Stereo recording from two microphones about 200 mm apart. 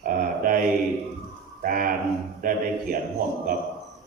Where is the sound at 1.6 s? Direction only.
45° right (ahead or behind).